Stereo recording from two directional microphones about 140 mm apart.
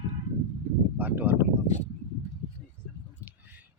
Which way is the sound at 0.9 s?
15° right (ahead or behind).